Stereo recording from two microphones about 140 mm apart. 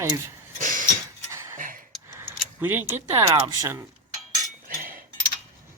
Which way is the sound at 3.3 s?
30° right (ahead or behind).